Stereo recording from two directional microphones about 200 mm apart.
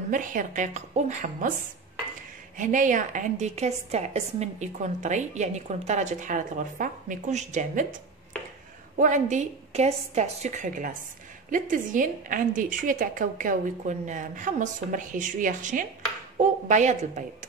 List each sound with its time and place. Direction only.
0.1 s a woman's voice: 40° right (ahead or behind)
2.5 s a woman's voice: 40° right (ahead or behind)
8.9 s a woman's voice: 40° right (ahead or behind)